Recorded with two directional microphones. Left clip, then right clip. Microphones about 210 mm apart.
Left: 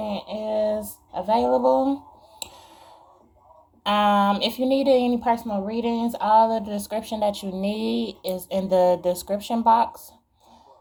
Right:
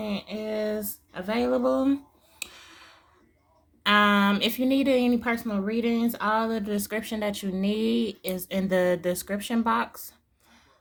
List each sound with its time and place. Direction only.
0.0 s a sound: 40° right (ahead or behind)
1.3 s speech: 35° right (ahead or behind)
2.6 s a sound: 35° right (ahead or behind)
3.8 s speech: 35° right (ahead or behind)
7.9 s speech: 90° right
8.4 s speech: 35° right (ahead or behind)